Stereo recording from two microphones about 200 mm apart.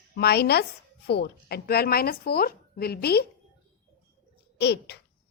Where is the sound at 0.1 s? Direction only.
55° left (ahead or behind).